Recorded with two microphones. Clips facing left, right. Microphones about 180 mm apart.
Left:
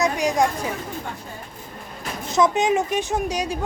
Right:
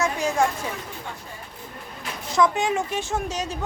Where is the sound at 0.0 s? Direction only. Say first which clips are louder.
Left 2 dB; 15° left (ahead or behind).